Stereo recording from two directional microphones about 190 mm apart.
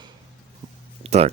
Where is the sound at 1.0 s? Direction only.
35° right (ahead or behind).